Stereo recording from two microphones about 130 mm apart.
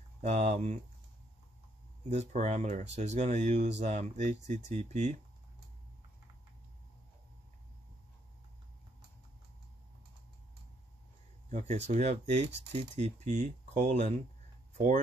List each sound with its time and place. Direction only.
0.2 s speech: 55° right (ahead or behind)
2.0 s speech: 60° right (ahead or behind)
11.5 s speech: 60° right (ahead or behind)